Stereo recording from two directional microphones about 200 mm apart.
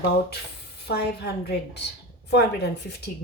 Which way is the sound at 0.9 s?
55° left (ahead or behind).